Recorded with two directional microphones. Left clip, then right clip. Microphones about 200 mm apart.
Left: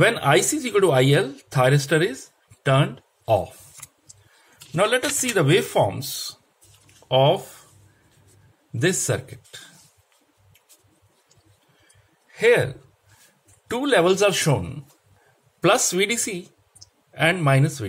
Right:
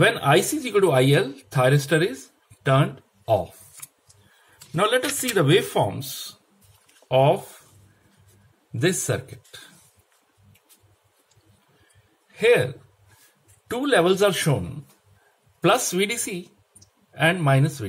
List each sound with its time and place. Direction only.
0.0 s speech: 15° left (ahead or behind)
4.7 s speech: 10° left (ahead or behind)
8.7 s speech: 10° left (ahead or behind)
12.3 s a sound: 15° left (ahead or behind)
13.7 s speech: 10° left (ahead or behind)